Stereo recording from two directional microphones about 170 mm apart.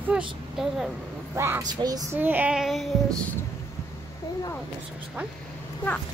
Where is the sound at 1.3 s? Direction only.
15° right (ahead or behind).